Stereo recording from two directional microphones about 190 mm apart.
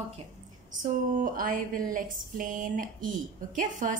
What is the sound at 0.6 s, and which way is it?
Speech, 45° right (ahead or behind).